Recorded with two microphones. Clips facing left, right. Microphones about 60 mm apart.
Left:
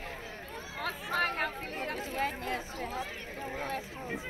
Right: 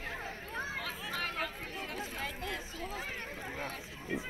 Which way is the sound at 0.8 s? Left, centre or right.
Left.